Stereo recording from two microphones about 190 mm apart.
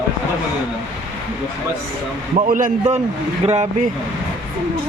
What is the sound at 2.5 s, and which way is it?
Speech, 45° right (ahead or behind).